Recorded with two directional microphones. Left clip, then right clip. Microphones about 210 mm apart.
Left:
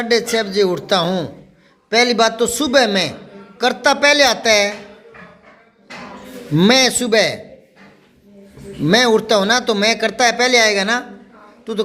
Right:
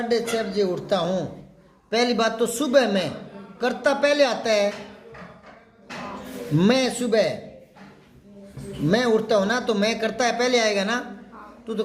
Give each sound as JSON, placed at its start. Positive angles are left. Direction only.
{"t": 0.1, "sound": "a man's voice", "side_deg": 40}
{"t": 6.6, "sound": "a man's voice", "side_deg": 35}
{"t": 8.9, "sound": "speech", "side_deg": 35}